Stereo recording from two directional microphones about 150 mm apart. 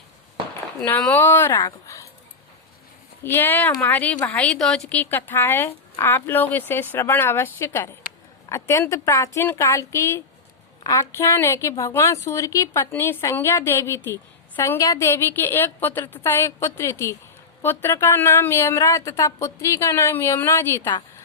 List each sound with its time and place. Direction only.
0.8 s speech: 10° left (ahead or behind)
3.2 s a woman's voice: 15° left (ahead or behind)